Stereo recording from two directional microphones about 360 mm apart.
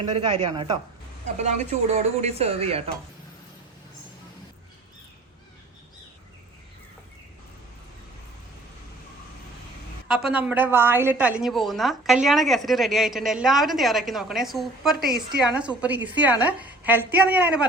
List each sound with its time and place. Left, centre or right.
0.4 s speech: centre
10.1 s a woman's voice: centre
14.9 s a woman's voice: right
15.5 s a woman's voice: centre